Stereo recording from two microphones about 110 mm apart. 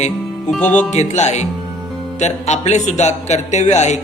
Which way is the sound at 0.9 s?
90° left.